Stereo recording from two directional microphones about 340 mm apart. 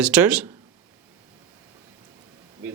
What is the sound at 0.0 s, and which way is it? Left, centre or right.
Speech, centre.